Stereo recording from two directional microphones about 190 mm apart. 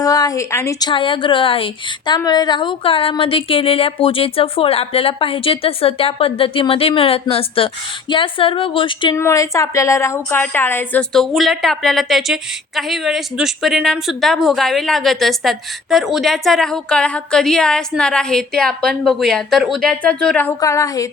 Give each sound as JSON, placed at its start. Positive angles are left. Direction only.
{"t": 0.0, "sound": "a woman's voice", "side_deg": 20}
{"t": 9.1, "sound": "a woman's voice", "side_deg": 15}